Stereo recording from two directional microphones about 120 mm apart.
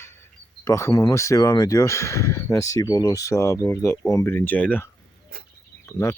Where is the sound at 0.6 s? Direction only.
25° left (ahead or behind).